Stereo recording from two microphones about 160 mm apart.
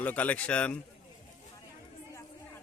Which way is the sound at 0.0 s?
10° left (ahead or behind).